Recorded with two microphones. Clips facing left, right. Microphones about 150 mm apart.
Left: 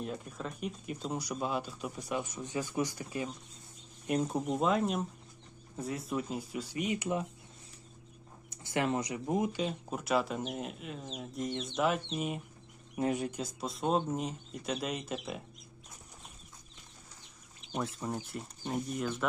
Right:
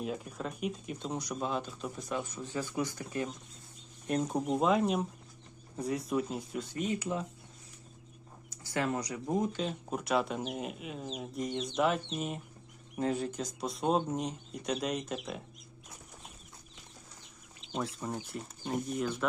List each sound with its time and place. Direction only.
0.0 s speech: centre (ahead or behind); by 7.3 s 20° left (ahead or behind)
8.4 s speech: 20° left (ahead or behind)
9.4 s speech: 5° left (ahead or behind)
13.6 s speech: centre (ahead or behind)
17.8 s speech: centre (ahead or behind)